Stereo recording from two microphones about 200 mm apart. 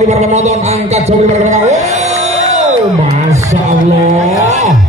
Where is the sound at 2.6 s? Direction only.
35° right (ahead or behind).